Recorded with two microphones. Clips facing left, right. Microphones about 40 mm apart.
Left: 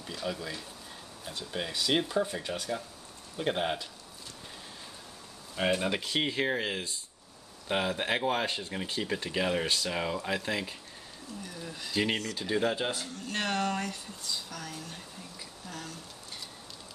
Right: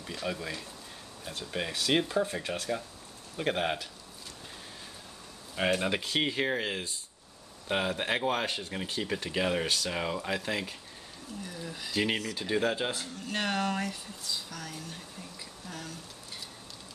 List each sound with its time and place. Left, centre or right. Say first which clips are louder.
0.0 s speech: right 1 dB; centre
1.6 s speech: right 2 dB; centre
2.4 s speech: right 1 dB; right
3.3 s speech: even; centre
5.6 s speech: even; centre